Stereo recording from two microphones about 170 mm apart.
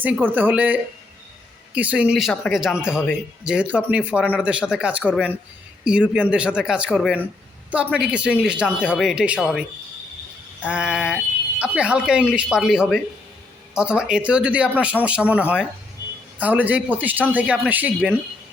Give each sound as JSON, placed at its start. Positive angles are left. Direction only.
{"t": 0.3, "sound": "speech", "side_deg": -10}